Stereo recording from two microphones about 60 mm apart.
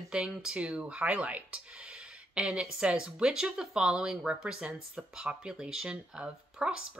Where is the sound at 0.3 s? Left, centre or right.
Centre.